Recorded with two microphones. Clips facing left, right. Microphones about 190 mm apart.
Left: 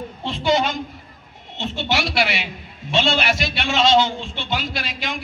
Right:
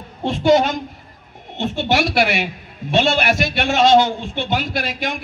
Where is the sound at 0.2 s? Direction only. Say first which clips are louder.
Right 6 dB; 45° right (ahead or behind).